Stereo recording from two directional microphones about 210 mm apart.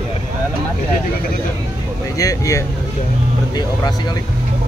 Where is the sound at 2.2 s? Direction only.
15° left (ahead or behind).